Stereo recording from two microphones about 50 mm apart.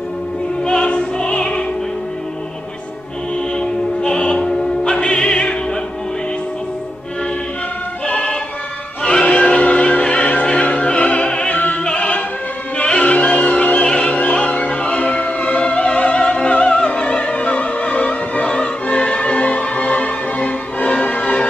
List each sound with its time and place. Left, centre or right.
0.7 s music: centre
3.5 s music: centre
8.1 s music: left
9.2 s opera: left
12.7 s music: left
13.9 s opera: left